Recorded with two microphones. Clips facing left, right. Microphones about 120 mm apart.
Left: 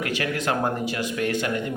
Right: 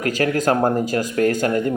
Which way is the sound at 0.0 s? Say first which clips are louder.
Right 7 dB; 40° right (ahead or behind).